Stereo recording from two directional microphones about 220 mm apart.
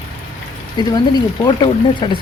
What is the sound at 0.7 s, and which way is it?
Speech, 20° left (ahead or behind).